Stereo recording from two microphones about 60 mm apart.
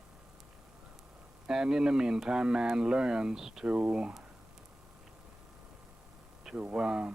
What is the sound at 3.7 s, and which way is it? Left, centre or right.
Speech, right.